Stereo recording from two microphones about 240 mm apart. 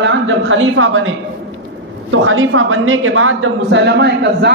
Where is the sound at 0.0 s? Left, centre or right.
Right.